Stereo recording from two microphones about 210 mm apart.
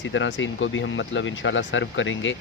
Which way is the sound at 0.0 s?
60° left (ahead or behind).